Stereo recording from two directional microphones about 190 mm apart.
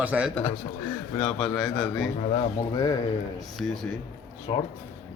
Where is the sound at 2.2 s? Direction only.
35° left (ahead or behind).